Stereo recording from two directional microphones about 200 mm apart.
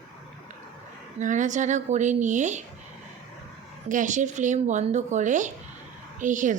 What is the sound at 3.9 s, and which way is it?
Speech, 40° right (ahead or behind).